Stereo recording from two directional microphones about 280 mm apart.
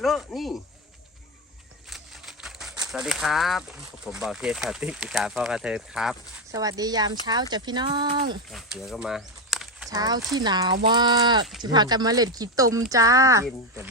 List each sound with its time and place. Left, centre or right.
0.0 s speech: centre
1.9 s a sound: centre
2.8 s speech: centre
6.6 s speech: centre
8.4 s speech: centre
9.9 s speech: centre